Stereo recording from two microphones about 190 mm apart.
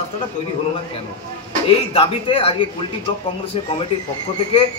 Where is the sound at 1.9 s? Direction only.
30° left (ahead or behind).